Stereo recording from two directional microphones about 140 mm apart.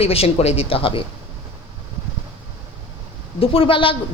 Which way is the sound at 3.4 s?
40° left (ahead or behind).